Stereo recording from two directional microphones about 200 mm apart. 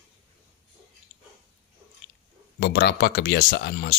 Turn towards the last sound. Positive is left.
turn(degrees=55)  # may be behind; listen again after turning